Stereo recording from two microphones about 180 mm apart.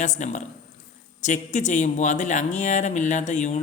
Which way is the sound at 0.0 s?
40° left (ahead or behind).